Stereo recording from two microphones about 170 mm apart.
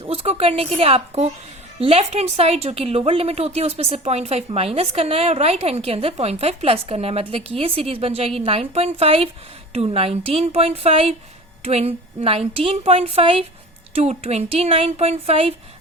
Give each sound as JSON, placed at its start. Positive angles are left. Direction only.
{"t": 0.0, "sound": "a woman's voice", "side_deg": -35}